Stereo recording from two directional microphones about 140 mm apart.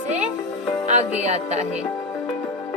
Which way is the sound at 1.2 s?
50° right (ahead or behind).